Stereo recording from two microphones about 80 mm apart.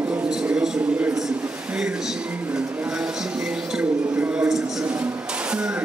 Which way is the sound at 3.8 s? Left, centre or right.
Centre.